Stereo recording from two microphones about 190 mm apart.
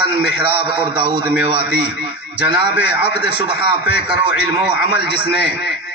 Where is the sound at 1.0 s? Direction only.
25° right (ahead or behind).